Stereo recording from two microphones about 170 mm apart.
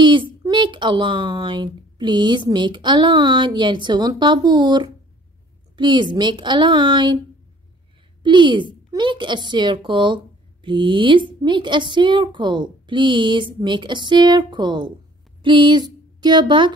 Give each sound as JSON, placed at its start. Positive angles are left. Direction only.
{"t": 0.0, "sound": "a woman's voice", "side_deg": -25}
{"t": 8.2, "sound": "a woman's voice", "side_deg": -30}
{"t": 15.4, "sound": "a sound", "side_deg": -30}